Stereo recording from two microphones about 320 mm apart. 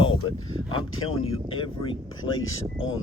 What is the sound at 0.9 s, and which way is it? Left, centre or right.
Speech, left.